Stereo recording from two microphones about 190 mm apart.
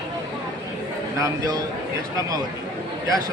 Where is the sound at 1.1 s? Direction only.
15° right (ahead or behind).